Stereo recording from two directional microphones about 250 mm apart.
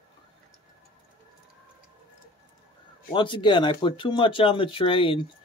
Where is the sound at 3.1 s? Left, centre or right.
Centre.